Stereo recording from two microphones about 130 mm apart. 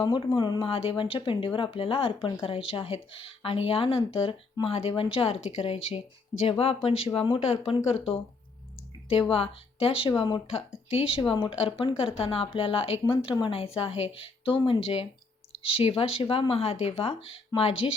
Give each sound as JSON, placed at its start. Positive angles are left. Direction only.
{"t": 0.3, "sound": "speech", "side_deg": 35}
{"t": 9.3, "sound": "speech", "side_deg": 45}
{"t": 10.8, "sound": "speech", "side_deg": 45}